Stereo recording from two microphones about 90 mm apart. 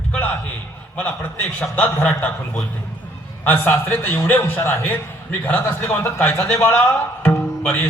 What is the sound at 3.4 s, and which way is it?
A man's voice, 25° left (ahead or behind).